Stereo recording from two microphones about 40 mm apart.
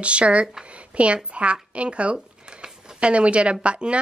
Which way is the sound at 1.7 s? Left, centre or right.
Right.